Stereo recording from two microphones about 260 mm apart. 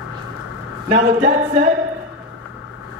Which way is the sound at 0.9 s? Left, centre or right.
Right.